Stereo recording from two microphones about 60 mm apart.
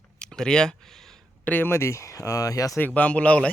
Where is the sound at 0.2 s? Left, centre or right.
Centre.